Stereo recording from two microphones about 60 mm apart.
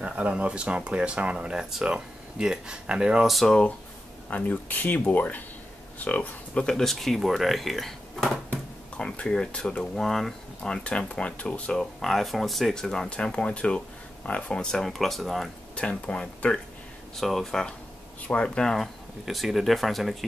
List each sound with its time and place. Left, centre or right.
0.0 s speech: centre
3.3 s speech: centre
4.3 s speech: left
6.7 s speech: centre
8.5 s speech: centre
11.8 s speech: centre
15.7 s speech: centre
17.2 s speech: centre
18.2 s speech: centre
19.2 s speech: centre